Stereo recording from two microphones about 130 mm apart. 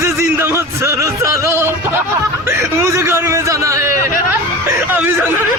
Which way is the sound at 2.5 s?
20° right (ahead or behind).